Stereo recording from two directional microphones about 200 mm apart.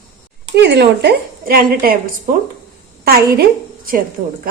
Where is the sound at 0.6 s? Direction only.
55° right (ahead or behind).